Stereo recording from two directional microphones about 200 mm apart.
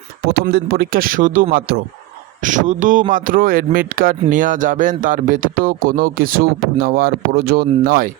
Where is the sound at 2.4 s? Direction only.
40° right (ahead or behind).